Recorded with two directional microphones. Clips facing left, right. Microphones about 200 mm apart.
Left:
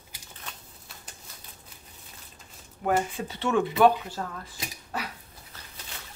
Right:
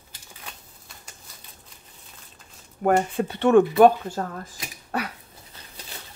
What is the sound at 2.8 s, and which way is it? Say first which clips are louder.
Speech: right 5 dB; 55° right (ahead or behind).